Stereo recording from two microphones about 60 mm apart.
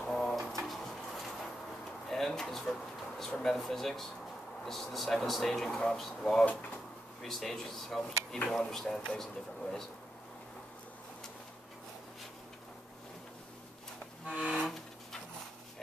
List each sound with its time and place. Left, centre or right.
0.0 s drawer open or close: centre
0.5 s a sound: centre
4.6 s speech: centre
14.3 s music: centre